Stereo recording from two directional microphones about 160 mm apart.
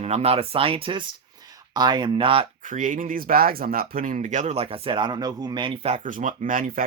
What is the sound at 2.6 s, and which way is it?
Speech, 55° right (ahead or behind).